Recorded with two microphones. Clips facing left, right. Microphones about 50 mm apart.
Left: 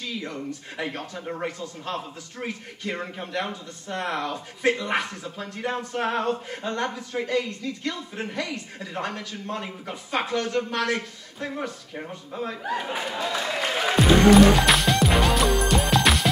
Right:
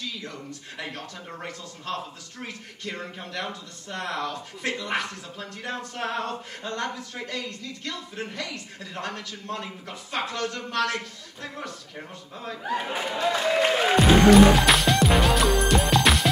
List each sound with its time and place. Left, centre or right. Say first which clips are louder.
0.0 s speech: left 4 dB; left
1.2 s speech: left 10 dB; centre
2.4 s speech: left 5 dB; left
12.6 s speech: right 3 dB; centre
13.7 s music: left 1 dB; centre